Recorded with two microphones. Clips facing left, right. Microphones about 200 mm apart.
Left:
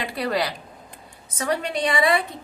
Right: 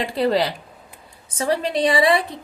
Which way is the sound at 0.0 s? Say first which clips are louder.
Right 5 dB; 25° right (ahead or behind).